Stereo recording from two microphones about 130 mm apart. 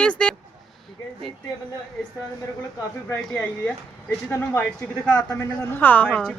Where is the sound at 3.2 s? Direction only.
5° left (ahead or behind).